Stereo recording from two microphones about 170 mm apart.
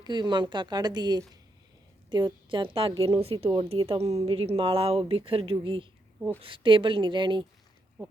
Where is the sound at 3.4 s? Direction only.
25° right (ahead or behind).